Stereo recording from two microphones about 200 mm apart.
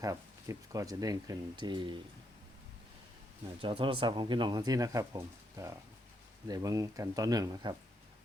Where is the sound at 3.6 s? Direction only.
25° right (ahead or behind).